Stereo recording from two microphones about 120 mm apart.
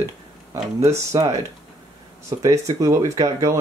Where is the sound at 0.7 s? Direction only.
25° right (ahead or behind).